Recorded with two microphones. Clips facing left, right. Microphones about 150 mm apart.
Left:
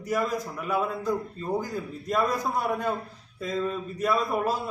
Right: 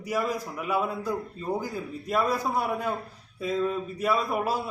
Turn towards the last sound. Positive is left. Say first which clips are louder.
# left 1 dB
turn(degrees=-10)  # may be behind; listen again after turning